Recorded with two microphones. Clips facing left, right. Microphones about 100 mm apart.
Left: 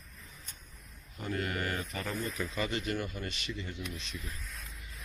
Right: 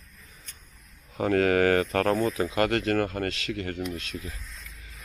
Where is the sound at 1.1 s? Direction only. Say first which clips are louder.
Right 13 dB; 90° right.